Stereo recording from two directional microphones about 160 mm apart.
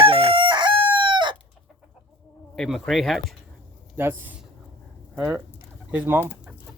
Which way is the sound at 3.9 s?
15° right (ahead or behind).